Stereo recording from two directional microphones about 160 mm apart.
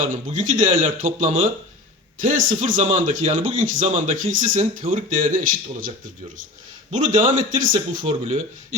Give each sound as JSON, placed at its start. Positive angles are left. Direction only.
{"t": 0.0, "sound": "speech", "side_deg": -50}
{"t": 6.9, "sound": "speech", "side_deg": -50}